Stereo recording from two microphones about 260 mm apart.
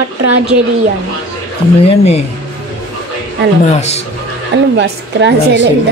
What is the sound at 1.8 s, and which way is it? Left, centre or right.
Speech, left.